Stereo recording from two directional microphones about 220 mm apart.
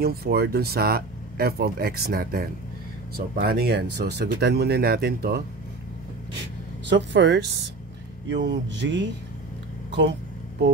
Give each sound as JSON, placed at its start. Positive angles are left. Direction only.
{"t": 0.0, "sound": "speech", "side_deg": -45}
{"t": 6.9, "sound": "speech", "side_deg": -55}